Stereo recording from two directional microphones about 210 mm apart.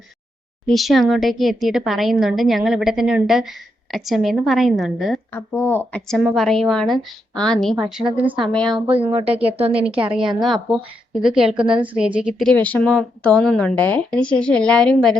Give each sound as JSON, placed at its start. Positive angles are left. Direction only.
{"t": 0.7, "sound": "a woman's voice", "side_deg": 0}
{"t": 8.5, "sound": "a woman's voice", "side_deg": 5}
{"t": 9.1, "sound": "speech", "side_deg": -30}
{"t": 10.1, "sound": "a woman's voice", "side_deg": -5}